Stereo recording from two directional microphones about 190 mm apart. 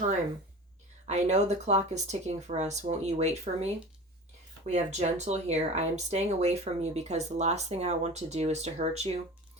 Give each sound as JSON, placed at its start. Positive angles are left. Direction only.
{"t": 1.0, "sound": "speech", "side_deg": -35}